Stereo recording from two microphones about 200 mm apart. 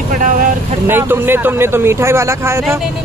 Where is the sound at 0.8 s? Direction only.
10° right (ahead or behind).